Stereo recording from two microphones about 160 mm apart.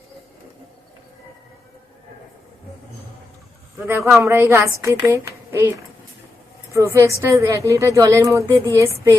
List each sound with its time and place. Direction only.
3.8 s a woman's voice: 15° right (ahead or behind)